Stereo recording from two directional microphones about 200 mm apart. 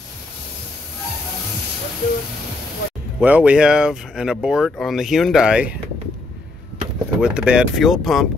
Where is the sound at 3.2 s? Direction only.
5° right (ahead or behind).